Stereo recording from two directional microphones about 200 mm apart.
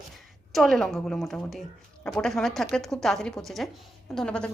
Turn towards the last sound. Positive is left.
turn(degrees=5)  # may be behind; listen again after turning